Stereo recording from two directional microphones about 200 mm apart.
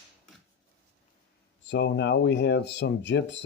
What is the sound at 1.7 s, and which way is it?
Speech, 60° left (ahead or behind).